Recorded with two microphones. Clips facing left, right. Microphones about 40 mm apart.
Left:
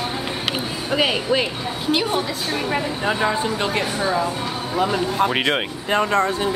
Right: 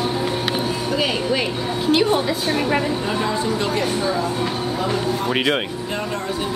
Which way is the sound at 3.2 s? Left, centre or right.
Left.